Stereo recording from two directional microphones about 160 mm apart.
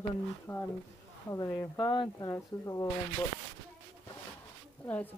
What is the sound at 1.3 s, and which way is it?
Speech, 20° left (ahead or behind).